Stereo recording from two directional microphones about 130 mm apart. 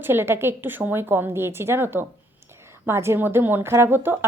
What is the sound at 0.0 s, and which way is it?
Speech, 15° right (ahead or behind).